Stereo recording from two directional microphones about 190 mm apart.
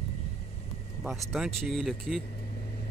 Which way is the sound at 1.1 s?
Centre (ahead or behind).